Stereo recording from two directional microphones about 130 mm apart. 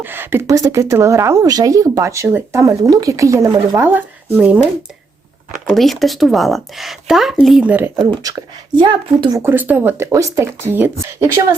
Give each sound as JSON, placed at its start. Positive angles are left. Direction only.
{"t": 0.0, "sound": "a woman's voice", "side_deg": -15}
{"t": 3.8, "sound": "speech", "side_deg": -15}
{"t": 5.7, "sound": "a woman's voice", "side_deg": 0}
{"t": 8.1, "sound": "speech", "side_deg": -30}
{"t": 9.4, "sound": "speech", "side_deg": -15}